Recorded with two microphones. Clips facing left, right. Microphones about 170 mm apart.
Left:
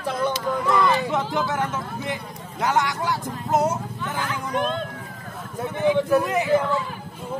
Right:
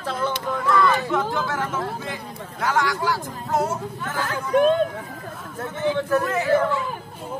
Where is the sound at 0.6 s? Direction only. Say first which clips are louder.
Right 1 dB; 20° left (ahead or behind).